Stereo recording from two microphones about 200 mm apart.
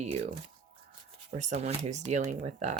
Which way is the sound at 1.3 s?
35° right (ahead or behind).